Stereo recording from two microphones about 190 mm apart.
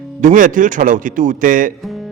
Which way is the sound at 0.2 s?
45° right (ahead or behind).